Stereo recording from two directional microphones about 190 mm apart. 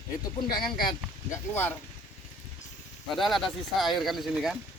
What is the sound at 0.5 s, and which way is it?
Speech, 25° left (ahead or behind).